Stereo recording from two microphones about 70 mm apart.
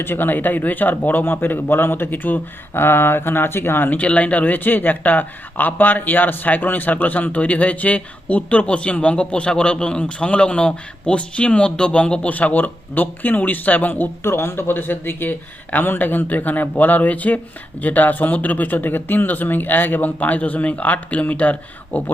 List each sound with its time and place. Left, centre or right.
0.0 s speech: left
14.3 s speech: left